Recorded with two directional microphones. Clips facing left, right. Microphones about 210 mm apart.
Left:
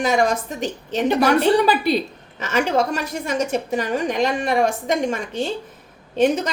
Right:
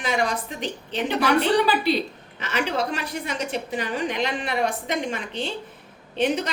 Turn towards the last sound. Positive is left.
turn(degrees=45)  # may be behind; listen again after turning